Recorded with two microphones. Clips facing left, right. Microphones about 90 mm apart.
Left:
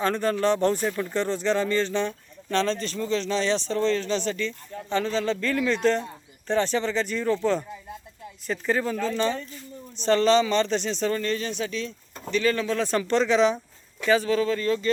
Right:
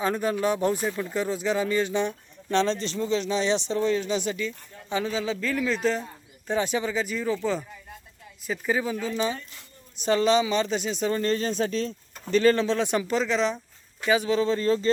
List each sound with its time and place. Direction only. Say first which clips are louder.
0.0 s speech: left 2 dB; 10° right (ahead or behind)
8.4 s speech: left 1 dB; 5° right (ahead or behind)
11.2 s speech: right 3 dB; 35° right (ahead or behind); by 13.1 s 15° right (ahead or behind)
13.1 s speech: left 6 dB; centre (ahead or behind)
14.1 s speech: left 1 dB; 20° right (ahead or behind)